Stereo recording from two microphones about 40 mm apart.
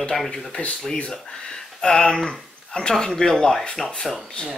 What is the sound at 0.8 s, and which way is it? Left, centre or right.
Speech, left.